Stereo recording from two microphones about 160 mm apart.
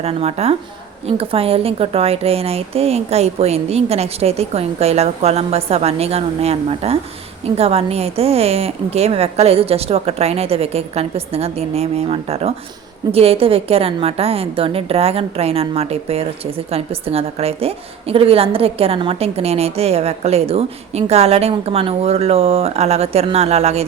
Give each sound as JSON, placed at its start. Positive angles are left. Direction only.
{"t": 0.0, "sound": "a woman's voice", "side_deg": -40}